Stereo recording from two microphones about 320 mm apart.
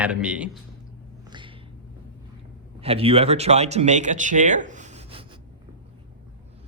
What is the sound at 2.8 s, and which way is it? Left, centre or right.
Speech, centre.